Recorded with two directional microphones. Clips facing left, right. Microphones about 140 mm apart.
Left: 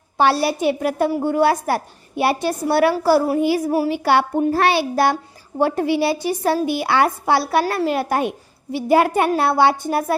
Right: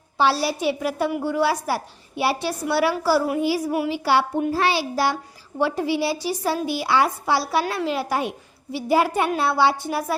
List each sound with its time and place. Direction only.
0.2 s a woman's voice: 55° left (ahead or behind)